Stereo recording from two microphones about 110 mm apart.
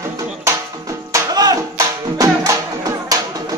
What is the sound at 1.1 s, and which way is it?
Music, 35° right (ahead or behind).